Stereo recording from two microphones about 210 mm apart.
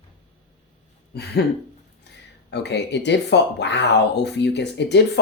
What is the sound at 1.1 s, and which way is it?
Speech, 50° left (ahead or behind).